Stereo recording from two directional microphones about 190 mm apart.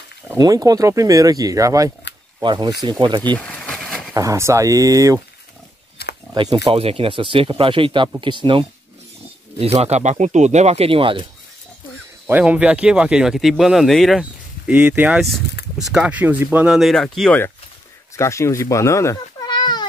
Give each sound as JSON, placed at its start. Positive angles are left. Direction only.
{"t": 0.3, "sound": "speech", "side_deg": -20}
{"t": 2.1, "sound": "a sound", "side_deg": 65}
{"t": 2.4, "sound": "speech", "side_deg": -20}
{"t": 3.3, "sound": "vehicle", "side_deg": 5}
{"t": 4.1, "sound": "speech", "side_deg": -15}
{"t": 6.3, "sound": "speech", "side_deg": -25}
{"t": 12.3, "sound": "speech", "side_deg": -10}
{"t": 18.1, "sound": "speech", "side_deg": 15}